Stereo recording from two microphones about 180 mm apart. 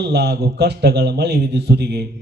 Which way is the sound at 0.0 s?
65° right (ahead or behind).